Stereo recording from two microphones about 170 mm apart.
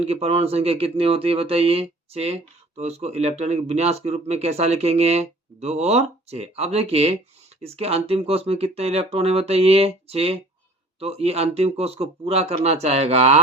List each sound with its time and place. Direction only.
0.0 s speech: 35° right (ahead or behind)